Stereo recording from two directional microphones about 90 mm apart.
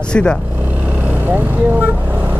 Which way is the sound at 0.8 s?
15° right (ahead or behind).